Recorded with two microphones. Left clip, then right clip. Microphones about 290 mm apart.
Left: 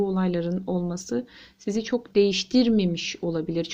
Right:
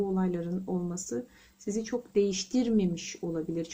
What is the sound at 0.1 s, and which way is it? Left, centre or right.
Speech, centre.